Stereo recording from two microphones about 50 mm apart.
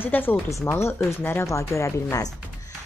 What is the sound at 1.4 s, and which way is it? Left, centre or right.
Speech, left.